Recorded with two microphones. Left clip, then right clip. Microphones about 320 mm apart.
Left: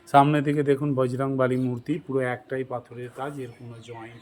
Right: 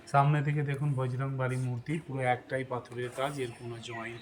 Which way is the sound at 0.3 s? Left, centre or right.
Left.